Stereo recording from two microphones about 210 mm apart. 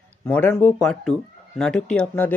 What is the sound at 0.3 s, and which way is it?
Speech, 10° left (ahead or behind).